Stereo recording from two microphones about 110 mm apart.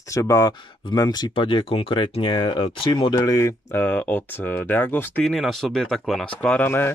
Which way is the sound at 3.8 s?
15° left (ahead or behind).